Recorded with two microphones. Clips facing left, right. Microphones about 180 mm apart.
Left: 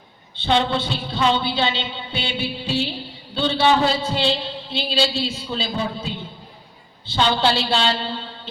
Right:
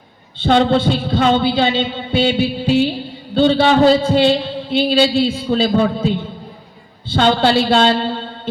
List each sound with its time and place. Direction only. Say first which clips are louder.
0.3 s a man's voice: right 7 dB; 45° right (ahead or behind)